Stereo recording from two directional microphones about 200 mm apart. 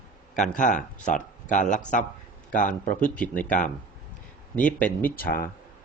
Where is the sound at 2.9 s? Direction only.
5° left (ahead or behind).